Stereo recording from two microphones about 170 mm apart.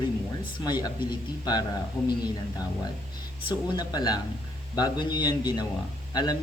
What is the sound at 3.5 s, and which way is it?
Speech, 25° left (ahead or behind).